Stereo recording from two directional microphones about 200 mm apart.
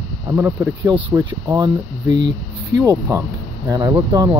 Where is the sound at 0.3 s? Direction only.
10° right (ahead or behind).